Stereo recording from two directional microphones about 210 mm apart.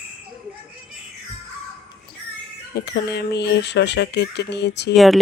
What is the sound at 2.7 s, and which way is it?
Speech, 50° left (ahead or behind).